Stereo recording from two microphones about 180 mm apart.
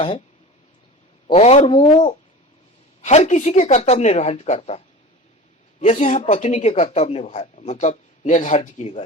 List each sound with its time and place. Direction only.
1.3 s speech: 35° left (ahead or behind)
5.8 s speech: 40° left (ahead or behind)